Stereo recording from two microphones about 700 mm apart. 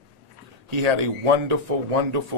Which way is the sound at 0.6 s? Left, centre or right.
Right.